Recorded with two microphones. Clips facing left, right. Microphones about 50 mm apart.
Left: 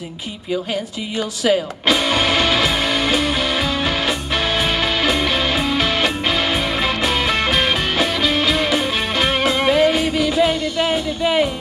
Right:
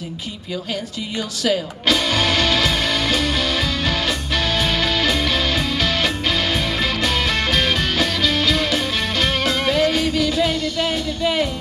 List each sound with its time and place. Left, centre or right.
1.4 s music: centre